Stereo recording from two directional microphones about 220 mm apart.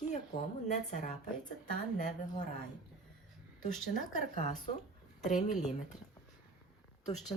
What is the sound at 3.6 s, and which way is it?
Speech, 35° left (ahead or behind).